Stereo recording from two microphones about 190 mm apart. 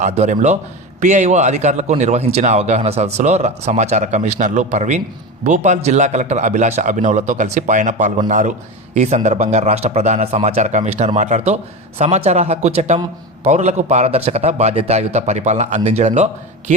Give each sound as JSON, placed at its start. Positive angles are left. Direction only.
{"t": 0.0, "sound": "a man's voice", "side_deg": -35}